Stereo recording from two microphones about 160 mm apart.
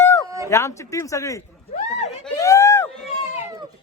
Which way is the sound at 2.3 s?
20° left (ahead or behind).